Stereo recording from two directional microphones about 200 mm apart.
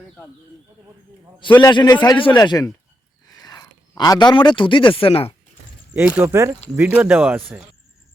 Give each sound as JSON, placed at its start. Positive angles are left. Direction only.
{"t": 1.5, "sound": "a man's voice", "side_deg": 20}
{"t": 6.1, "sound": "speech", "side_deg": -15}